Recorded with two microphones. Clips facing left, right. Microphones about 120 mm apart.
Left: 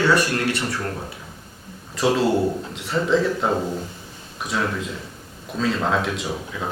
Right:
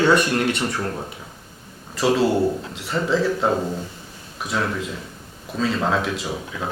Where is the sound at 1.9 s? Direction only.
Centre (ahead or behind).